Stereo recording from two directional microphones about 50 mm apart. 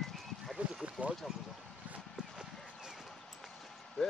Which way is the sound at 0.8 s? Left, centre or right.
Right.